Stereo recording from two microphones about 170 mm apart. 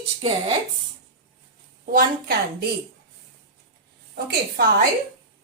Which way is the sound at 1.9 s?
60° right (ahead or behind).